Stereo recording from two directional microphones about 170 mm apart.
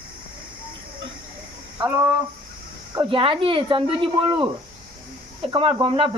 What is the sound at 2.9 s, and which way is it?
Speech, 30° right (ahead or behind).